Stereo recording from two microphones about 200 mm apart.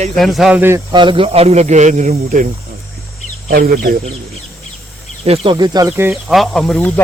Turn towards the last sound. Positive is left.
turn(degrees=5)  # may be behind; listen again after turning